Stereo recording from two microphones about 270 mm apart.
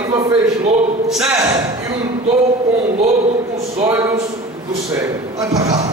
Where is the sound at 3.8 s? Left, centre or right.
Centre.